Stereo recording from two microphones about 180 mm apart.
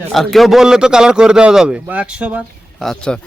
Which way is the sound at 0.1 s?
Centre (ahead or behind).